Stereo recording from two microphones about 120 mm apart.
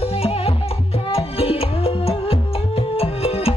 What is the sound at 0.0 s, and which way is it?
Music, 55° left (ahead or behind).